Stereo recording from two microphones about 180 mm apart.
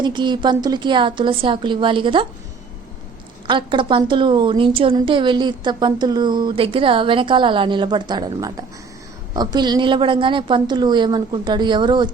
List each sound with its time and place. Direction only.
0.0 s a woman's voice: 25° right (ahead or behind)
3.4 s a woman's voice: 25° right (ahead or behind)